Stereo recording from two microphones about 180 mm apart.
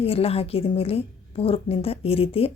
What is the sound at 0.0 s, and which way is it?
Speech, 35° left (ahead or behind).